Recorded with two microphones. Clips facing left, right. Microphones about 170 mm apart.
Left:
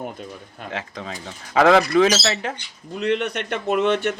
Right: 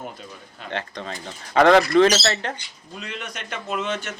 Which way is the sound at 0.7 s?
5° left (ahead or behind).